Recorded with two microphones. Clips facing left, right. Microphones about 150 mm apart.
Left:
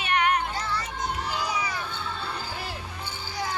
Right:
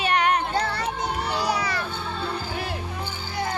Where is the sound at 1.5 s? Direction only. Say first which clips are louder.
Right 5 dB; 75° right (ahead or behind).